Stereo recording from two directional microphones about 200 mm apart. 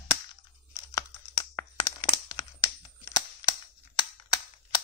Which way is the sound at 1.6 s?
20° left (ahead or behind).